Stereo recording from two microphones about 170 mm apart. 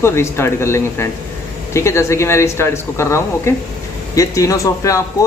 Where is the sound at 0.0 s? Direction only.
15° left (ahead or behind).